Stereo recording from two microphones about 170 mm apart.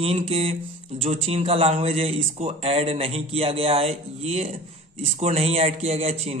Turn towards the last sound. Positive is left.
turn(degrees=-40)  # may be behind; listen again after turning